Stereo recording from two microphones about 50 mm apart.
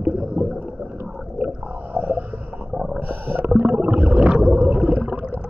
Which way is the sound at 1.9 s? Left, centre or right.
Right.